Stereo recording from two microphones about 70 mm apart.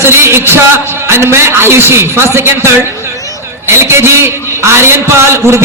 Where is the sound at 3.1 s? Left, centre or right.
Left.